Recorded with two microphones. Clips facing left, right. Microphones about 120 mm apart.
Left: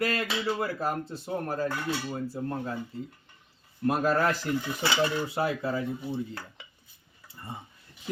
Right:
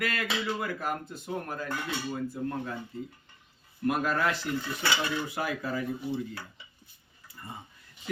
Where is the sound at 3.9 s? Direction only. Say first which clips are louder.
Left 3 dB; 35° left (ahead or behind).